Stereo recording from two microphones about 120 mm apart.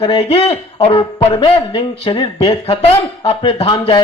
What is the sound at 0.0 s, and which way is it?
Speech, 50° left (ahead or behind).